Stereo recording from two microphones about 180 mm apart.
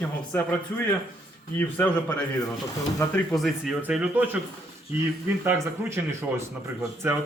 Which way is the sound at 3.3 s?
Centre (ahead or behind).